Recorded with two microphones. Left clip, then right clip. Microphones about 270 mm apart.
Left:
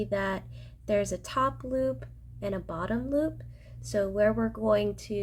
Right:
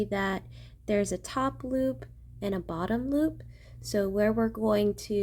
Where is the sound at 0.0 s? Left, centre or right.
Right.